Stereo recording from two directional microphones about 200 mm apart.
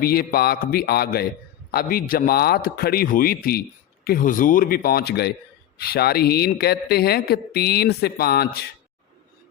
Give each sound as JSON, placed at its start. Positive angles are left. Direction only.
{"t": 0.0, "sound": "speech", "side_deg": 50}